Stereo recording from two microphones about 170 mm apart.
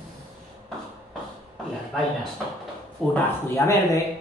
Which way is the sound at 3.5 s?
15° left (ahead or behind).